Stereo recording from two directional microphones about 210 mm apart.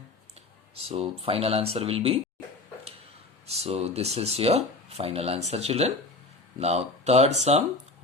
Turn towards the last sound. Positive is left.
turn(degrees=-30)  # may be behind; listen again after turning